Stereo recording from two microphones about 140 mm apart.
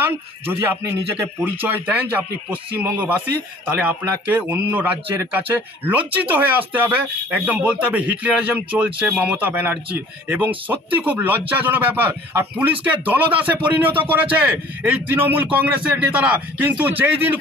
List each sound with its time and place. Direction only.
0.0 s a man's voice: 15° right (ahead or behind)